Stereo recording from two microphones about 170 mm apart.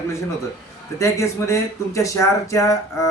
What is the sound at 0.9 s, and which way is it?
Speech, 15° left (ahead or behind).